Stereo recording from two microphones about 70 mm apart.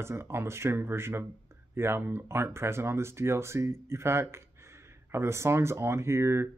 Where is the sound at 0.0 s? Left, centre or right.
Right.